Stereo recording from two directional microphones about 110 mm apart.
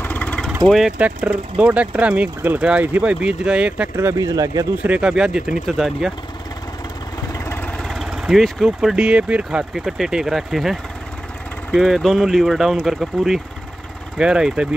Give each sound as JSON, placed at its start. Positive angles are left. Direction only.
{"t": 0.0, "sound": "vehicle", "side_deg": 15}
{"t": 0.7, "sound": "speech", "side_deg": 0}
{"t": 0.9, "sound": "speech", "side_deg": -10}
{"t": 3.9, "sound": "speech", "side_deg": -25}
{"t": 4.8, "sound": "speech", "side_deg": -10}
{"t": 7.3, "sound": "vehicle", "side_deg": 20}
{"t": 7.8, "sound": "speech", "side_deg": 0}